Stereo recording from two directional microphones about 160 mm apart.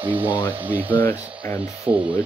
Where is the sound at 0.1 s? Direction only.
10° right (ahead or behind).